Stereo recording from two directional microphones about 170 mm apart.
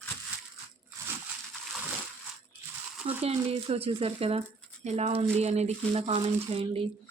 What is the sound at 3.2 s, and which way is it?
Speech, 35° right (ahead or behind).